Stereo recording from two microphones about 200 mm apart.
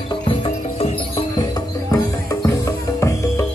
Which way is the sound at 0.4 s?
30° left (ahead or behind).